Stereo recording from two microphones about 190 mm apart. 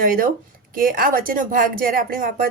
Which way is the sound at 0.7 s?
50° right (ahead or behind).